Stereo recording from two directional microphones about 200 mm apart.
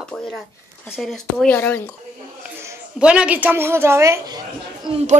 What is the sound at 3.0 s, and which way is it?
A woman's voice, 5° right (ahead or behind).